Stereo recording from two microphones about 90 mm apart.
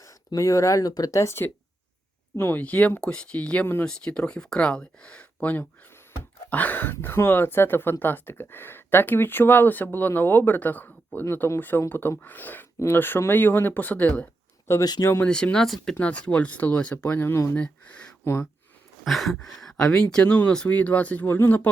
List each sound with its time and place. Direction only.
0.0 s speech: 40° left (ahead or behind); by 14.3 s 15° left (ahead or behind)
14.7 s speech: 30° left (ahead or behind)
15.2 s speech: 10° left (ahead or behind)
16.0 s speech: 15° left (ahead or behind)
17.6 s speech: 15° left (ahead or behind)
19.0 s a sound: centre (ahead or behind)
19.5 s speech: 5° left (ahead or behind); by 21.7 s 25° left (ahead or behind)